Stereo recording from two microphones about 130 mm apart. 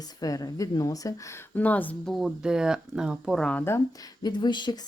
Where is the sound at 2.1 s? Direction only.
5° right (ahead or behind).